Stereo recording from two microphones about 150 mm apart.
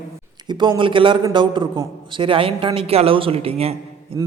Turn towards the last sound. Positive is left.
turn(degrees=-20)  # may be behind; listen again after turning